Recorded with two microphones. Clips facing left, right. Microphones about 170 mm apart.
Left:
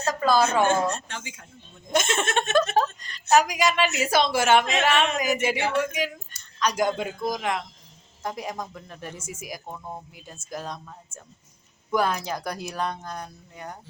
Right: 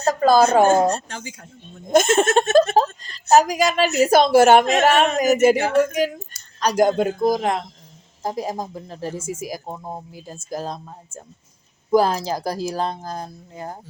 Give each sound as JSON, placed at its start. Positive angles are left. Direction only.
{"t": 0.0, "sound": "a woman's voice", "side_deg": -40}